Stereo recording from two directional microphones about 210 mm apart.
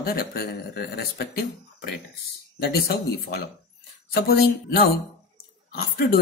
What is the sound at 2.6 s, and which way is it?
Speech, 50° left (ahead or behind).